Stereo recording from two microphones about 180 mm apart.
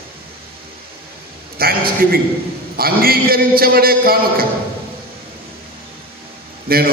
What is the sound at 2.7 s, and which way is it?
A man's voice, 55° right (ahead or behind).